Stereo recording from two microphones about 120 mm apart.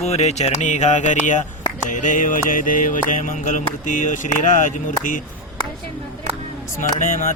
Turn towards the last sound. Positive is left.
turn(degrees=90)